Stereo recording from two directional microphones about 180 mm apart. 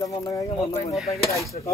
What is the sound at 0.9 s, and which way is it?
Speech, centre (ahead or behind).